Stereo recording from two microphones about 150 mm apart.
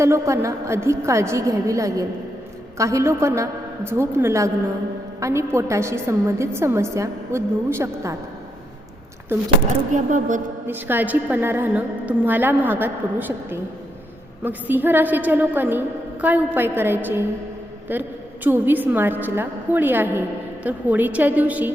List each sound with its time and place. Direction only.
0.0 s a woman's voice: 20° right (ahead or behind)
9.9 s speech: 60° right (ahead or behind)
10.7 s a woman's voice: 15° right (ahead or behind)